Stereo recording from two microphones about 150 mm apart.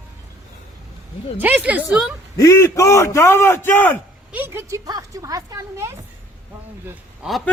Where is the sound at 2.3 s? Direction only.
20° left (ahead or behind).